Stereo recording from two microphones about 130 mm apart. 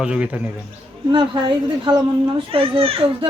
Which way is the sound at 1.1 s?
40° right (ahead or behind).